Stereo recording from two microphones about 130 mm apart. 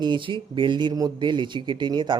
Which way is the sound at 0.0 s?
40° right (ahead or behind).